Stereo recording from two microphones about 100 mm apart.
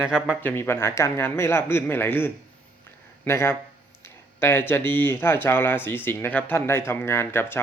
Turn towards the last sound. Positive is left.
turn(degrees=20)  # may be behind; listen again after turning